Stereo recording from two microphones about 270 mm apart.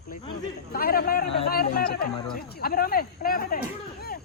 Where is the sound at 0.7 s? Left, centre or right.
Left.